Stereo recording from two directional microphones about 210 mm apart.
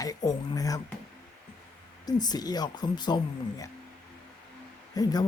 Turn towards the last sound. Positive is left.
turn(degrees=15)  # may be behind; listen again after turning